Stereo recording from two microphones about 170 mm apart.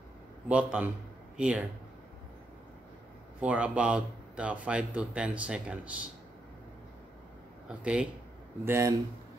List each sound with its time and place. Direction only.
0.5 s speech: 5° right (ahead or behind)
3.3 s speech: 10° right (ahead or behind)
7.6 s speech: 5° right (ahead or behind)
8.6 s speech: 15° right (ahead or behind)